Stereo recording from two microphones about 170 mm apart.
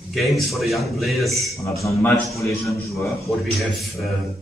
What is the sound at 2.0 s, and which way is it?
A man's voice, 15° left (ahead or behind).